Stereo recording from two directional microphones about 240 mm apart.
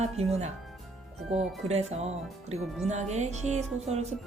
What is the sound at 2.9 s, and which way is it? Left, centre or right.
Speech, right.